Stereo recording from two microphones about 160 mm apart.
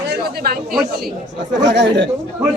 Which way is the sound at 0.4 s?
70° right (ahead or behind).